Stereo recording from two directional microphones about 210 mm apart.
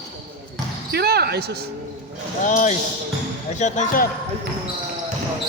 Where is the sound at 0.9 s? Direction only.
50° right (ahead or behind).